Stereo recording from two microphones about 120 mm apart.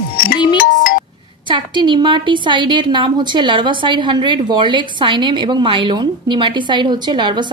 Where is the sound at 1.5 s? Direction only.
40° right (ahead or behind).